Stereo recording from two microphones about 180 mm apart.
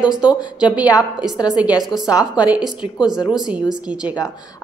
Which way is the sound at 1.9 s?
5° right (ahead or behind).